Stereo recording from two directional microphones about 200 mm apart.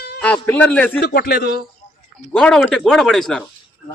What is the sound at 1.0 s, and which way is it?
Speech, 55° left (ahead or behind).